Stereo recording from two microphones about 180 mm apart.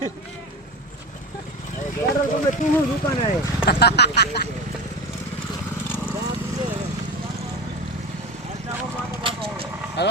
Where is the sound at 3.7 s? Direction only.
65° left (ahead or behind).